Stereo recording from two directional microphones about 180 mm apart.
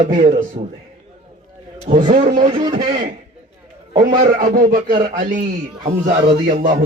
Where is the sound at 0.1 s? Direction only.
45° right (ahead or behind).